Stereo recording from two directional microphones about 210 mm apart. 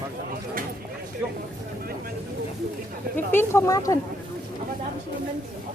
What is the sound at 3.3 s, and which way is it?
Speech, 10° left (ahead or behind).